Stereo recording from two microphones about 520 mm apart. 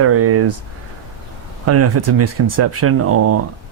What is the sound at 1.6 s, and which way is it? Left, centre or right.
Speech, right.